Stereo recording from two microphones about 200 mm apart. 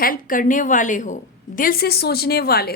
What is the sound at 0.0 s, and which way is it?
A woman's voice, 45° left (ahead or behind).